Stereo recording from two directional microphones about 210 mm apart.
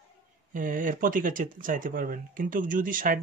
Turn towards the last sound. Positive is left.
turn(degrees=-40)  # may be behind; listen again after turning